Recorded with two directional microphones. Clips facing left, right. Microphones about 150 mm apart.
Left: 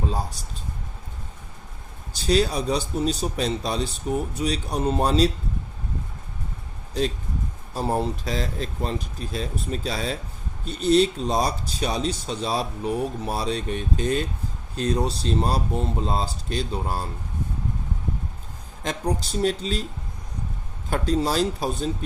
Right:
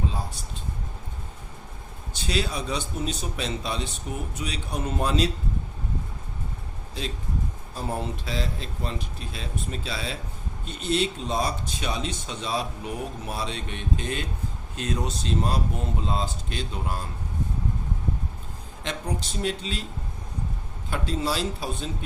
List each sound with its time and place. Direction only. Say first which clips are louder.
0.1 s speech: left 5 dB; 40° left (ahead or behind)
2.1 s speech: left 7 dB; 40° left (ahead or behind)
7.8 s speech: left 6 dB; 40° left (ahead or behind)
18.8 s speech: left 5 dB; 40° left (ahead or behind)
20.9 s speech: left 5 dB; 40° left (ahead or behind)